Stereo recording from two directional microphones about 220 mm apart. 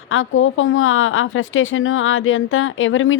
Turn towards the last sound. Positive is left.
turn(degrees=65)  # may be behind; listen again after turning